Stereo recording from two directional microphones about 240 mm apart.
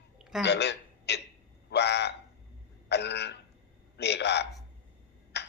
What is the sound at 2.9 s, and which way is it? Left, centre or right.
Burping, left.